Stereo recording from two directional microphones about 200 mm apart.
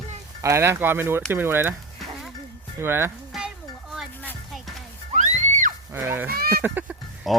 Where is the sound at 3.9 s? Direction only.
Centre (ahead or behind).